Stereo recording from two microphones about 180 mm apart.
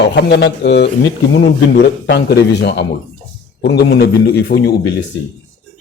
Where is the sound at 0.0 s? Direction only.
70° left (ahead or behind).